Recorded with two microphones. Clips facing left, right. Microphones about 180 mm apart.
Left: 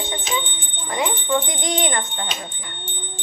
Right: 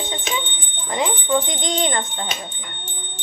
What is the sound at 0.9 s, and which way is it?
Speech, 25° right (ahead or behind).